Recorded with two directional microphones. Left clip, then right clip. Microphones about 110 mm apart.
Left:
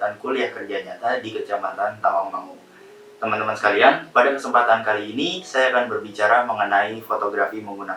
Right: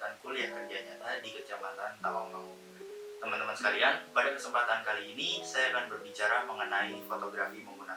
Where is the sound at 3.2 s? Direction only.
10° right (ahead or behind).